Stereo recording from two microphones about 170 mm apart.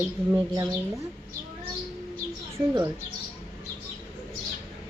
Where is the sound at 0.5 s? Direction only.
20° right (ahead or behind).